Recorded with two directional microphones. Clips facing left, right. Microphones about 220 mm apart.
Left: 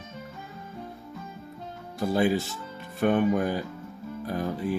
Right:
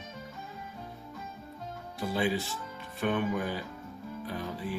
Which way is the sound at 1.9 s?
45° left (ahead or behind).